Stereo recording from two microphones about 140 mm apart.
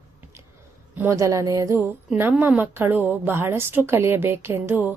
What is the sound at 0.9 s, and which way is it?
A woman's voice, 20° right (ahead or behind).